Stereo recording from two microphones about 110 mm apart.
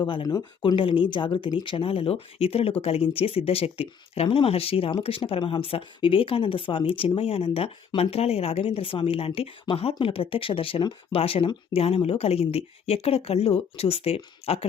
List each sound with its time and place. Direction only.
0.0 s speech: 40° left (ahead or behind)
0.6 s speech: 50° left (ahead or behind); by 14.7 s 65° left (ahead or behind)